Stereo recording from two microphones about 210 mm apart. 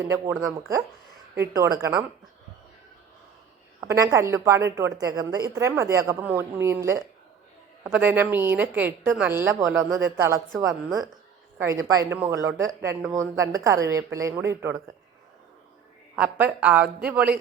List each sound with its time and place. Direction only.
0.0 s a woman's voice: 10° right (ahead or behind)
1.4 s a woman's voice: 15° right (ahead or behind)
3.8 s a woman's voice: 15° right (ahead or behind)
16.1 s a woman's voice: 5° right (ahead or behind)